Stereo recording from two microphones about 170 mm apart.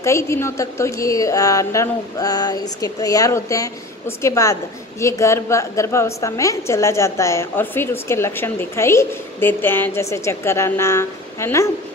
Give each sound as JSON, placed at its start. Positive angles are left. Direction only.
{"t": 0.0, "sound": "a woman's voice", "side_deg": 15}